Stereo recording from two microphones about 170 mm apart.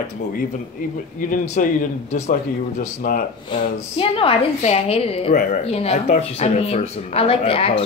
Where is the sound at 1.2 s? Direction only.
50° left (ahead or behind).